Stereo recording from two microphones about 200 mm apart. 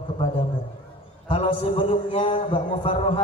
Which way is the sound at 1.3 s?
25° left (ahead or behind).